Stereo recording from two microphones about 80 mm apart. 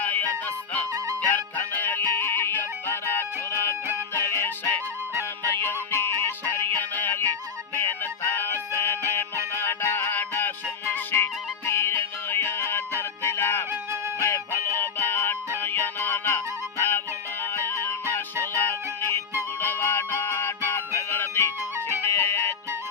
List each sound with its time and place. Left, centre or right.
0.0 s music: left